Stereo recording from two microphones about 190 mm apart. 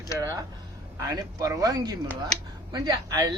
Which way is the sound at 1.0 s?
15° right (ahead or behind).